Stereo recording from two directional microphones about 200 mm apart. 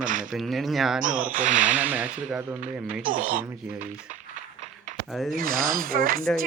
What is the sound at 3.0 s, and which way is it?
Speech, 40° right (ahead or behind).